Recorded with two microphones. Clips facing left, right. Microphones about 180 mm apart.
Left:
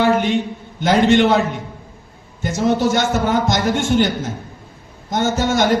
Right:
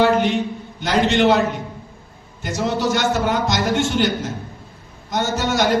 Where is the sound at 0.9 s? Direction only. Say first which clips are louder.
Left 3 dB; 50° left (ahead or behind).